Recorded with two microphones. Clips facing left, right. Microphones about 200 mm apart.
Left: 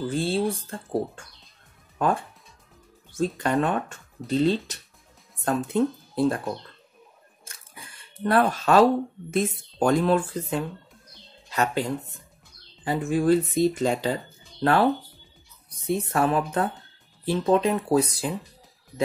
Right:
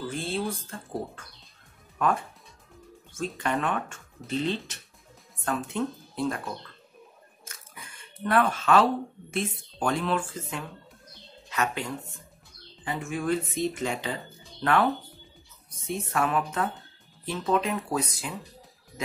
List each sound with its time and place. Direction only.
0.1 s speech: 30° left (ahead or behind)
2.0 s speech: 30° left (ahead or behind)
3.3 s speech: 35° left (ahead or behind)
7.4 s a sound: 35° left (ahead or behind)
9.3 s speech: 40° left (ahead or behind)
16.0 s speech: 35° left (ahead or behind)